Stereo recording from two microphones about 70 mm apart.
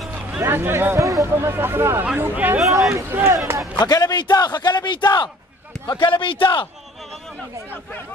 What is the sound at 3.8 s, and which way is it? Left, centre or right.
A man's voice, left.